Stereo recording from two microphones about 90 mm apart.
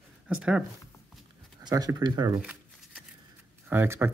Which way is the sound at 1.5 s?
45° right (ahead or behind).